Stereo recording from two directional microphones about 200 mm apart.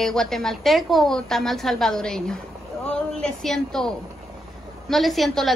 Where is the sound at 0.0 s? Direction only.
Centre (ahead or behind).